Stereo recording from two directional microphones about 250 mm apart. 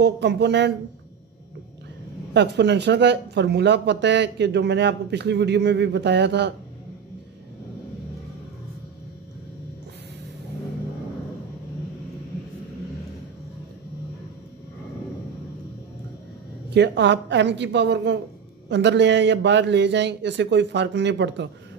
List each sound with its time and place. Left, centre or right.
0.0 s speech: right
2.3 s speech: right
16.7 s speech: right